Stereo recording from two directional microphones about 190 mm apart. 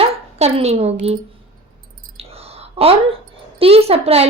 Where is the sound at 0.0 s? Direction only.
30° right (ahead or behind).